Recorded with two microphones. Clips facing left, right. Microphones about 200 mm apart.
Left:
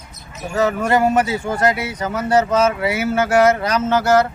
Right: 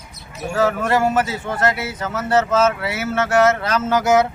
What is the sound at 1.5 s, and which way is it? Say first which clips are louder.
Speech: left 2 dB; 5° right (ahead or behind).